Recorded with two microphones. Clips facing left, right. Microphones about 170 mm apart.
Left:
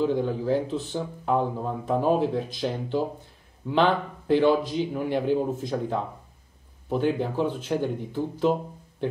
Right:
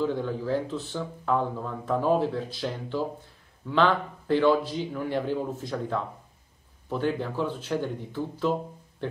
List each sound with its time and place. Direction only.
0.0 s speech: 15° left (ahead or behind)